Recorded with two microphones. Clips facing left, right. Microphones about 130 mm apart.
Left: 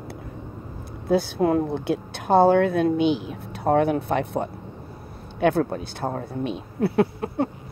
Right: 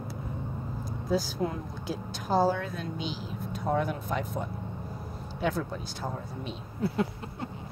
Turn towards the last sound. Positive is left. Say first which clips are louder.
# left 10 dB
turn(degrees=65)  # may be behind; listen again after turning